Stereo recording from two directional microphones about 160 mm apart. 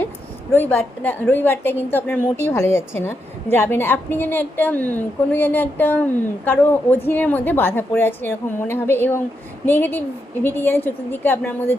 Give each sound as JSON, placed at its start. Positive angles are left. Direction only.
{"t": 0.5, "sound": "a woman's voice", "side_deg": 15}